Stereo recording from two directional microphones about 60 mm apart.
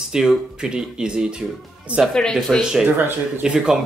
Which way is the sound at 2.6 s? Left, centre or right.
Centre.